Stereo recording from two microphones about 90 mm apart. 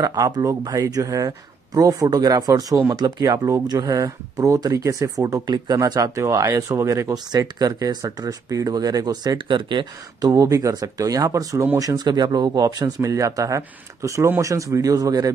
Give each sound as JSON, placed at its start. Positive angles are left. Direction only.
{"t": 0.0, "sound": "speech", "side_deg": -40}
{"t": 10.2, "sound": "speech", "side_deg": -40}